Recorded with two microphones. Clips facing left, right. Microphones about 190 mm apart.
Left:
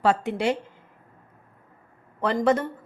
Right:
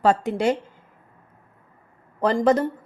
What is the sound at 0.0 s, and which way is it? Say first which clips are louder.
Speech: right 3 dB; 40° right (ahead or behind).